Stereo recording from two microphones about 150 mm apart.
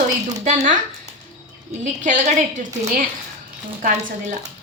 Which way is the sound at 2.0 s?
55° right (ahead or behind).